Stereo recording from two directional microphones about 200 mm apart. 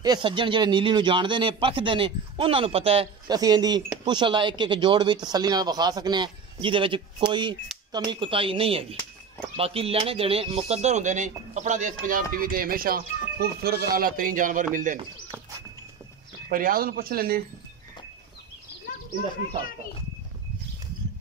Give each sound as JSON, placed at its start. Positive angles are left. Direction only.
{"t": 0.0, "sound": "speech", "side_deg": -20}
{"t": 16.4, "sound": "speech", "side_deg": -45}